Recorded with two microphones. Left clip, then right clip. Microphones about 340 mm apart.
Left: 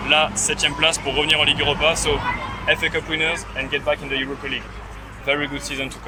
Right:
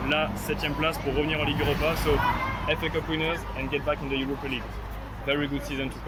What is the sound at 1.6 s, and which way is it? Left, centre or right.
Speech, left.